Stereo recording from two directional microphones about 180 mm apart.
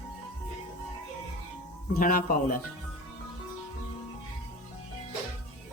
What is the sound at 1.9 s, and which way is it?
Speech, 55° left (ahead or behind).